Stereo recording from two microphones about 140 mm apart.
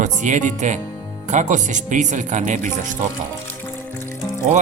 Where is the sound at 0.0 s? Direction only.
60° right (ahead or behind).